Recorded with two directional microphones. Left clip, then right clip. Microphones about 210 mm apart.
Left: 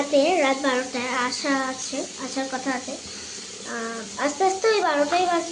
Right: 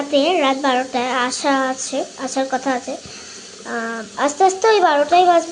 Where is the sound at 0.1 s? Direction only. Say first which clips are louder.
Right 4 dB; 30° right (ahead or behind).